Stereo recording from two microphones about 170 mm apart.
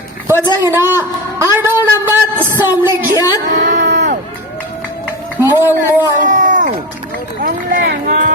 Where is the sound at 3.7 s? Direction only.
85° right.